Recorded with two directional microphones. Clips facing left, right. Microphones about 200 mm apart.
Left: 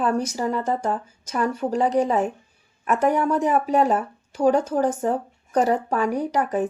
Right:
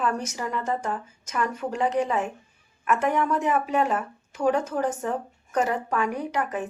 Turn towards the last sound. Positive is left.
turn(degrees=35)  # may be behind; listen again after turning